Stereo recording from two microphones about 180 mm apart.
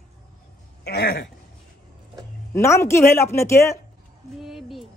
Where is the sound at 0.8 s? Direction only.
65° left (ahead or behind).